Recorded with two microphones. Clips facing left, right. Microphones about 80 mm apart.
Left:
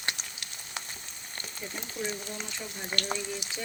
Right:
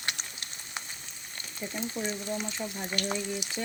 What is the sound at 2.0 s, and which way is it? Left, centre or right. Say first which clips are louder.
Speech: even; right.